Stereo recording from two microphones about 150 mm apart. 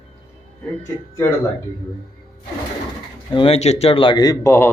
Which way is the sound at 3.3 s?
40° left (ahead or behind).